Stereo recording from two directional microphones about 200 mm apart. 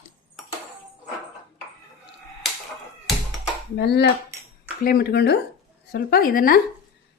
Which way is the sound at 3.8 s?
55° left (ahead or behind).